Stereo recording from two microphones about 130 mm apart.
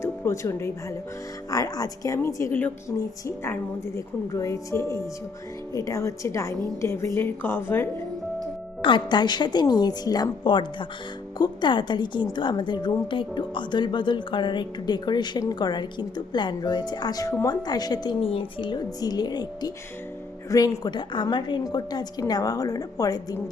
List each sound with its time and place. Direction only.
0.0 s a woman's voice: 20° left (ahead or behind)
8.8 s a woman's voice: 35° left (ahead or behind)